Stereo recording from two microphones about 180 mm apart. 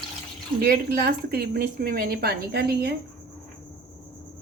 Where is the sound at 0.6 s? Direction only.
60° right (ahead or behind).